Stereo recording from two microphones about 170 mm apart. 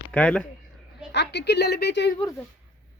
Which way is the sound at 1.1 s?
90° left.